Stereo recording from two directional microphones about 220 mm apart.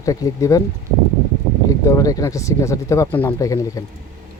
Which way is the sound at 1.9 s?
15° left (ahead or behind).